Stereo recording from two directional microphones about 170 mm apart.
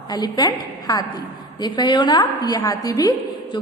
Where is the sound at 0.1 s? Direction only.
25° left (ahead or behind).